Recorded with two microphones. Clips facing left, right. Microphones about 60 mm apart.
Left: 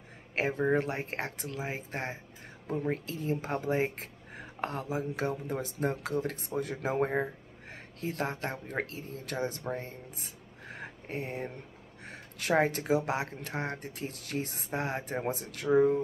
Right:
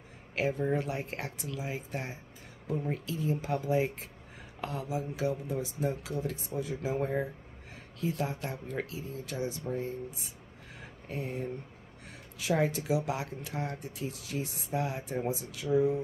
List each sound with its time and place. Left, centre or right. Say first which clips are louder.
0.4 s speech: left 2 dB; left
10.7 s a sound: left 3 dB; left
12.5 s speech: left 3 dB; left